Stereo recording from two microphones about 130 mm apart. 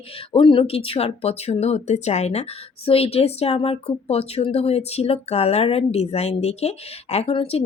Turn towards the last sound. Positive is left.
turn(degrees=55)  # may be behind; listen again after turning